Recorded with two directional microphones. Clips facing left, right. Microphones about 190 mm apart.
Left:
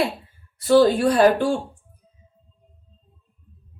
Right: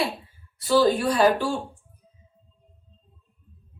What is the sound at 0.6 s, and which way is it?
Speech, 50° left (ahead or behind).